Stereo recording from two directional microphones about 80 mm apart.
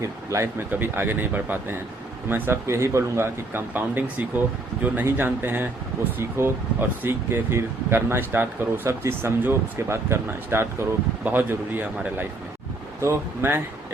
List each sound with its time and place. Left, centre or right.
0.0 s speech: right
0.7 s speech: right